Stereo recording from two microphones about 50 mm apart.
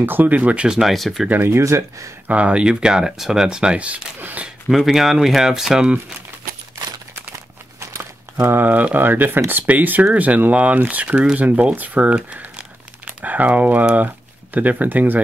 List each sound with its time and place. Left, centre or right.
0.0 s speech: right
0.7 s speech: centre
0.9 s speech: centre
1.3 s speech: right
1.6 s speech: right
2.2 s speech: right
4.2 s speech: right
4.6 s speech: centre
7.8 s crumpling: right
8.7 s speech: right
12.3 s crumpling: right
13.9 s speech: right